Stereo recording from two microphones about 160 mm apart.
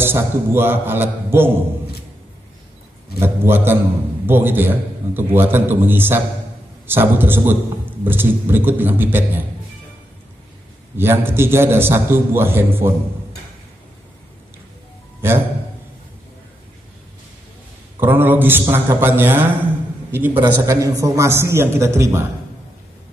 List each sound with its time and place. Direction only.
0.0 s a man's voice: 15° right (ahead or behind)
3.2 s a man's voice: 15° right (ahead or behind)
11.0 s a man's voice: 15° right (ahead or behind)
15.2 s a man's voice: 15° right (ahead or behind)
18.0 s a man's voice: 10° right (ahead or behind)